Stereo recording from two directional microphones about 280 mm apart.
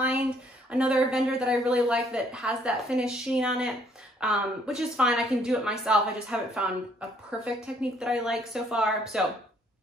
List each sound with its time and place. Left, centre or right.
0.7 s speech: centre